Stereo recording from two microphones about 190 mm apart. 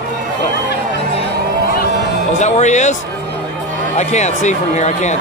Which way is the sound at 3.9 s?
35° left (ahead or behind).